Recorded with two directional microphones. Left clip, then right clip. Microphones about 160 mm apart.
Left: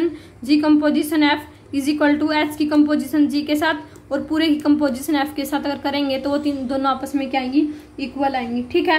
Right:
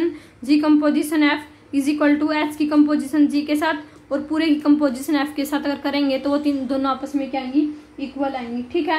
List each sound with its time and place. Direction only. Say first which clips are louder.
0.0 s a woman's voice: left 1 dB; 20° right (ahead or behind)
7.0 s a woman's voice: left 3 dB; centre (ahead or behind)